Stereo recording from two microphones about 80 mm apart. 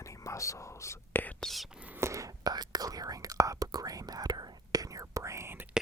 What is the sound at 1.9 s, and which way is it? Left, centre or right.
Whispering, right.